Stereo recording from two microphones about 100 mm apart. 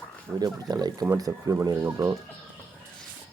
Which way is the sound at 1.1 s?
30° right (ahead or behind).